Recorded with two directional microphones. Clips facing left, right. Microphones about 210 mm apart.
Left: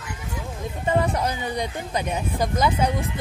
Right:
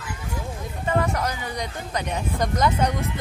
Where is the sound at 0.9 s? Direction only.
25° left (ahead or behind).